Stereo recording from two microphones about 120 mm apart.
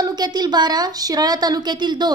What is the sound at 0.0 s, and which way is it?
A woman's voice, 35° right (ahead or behind).